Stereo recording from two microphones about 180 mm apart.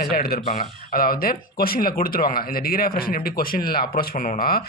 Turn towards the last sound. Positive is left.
turn(degrees=55)  # may be behind; listen again after turning